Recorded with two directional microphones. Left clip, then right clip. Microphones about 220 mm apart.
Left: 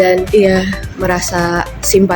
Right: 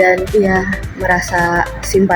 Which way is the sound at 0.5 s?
35° left (ahead or behind).